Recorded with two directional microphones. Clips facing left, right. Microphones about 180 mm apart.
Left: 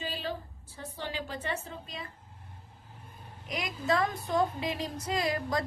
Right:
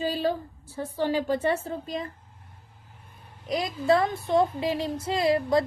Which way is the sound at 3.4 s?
35° right (ahead or behind).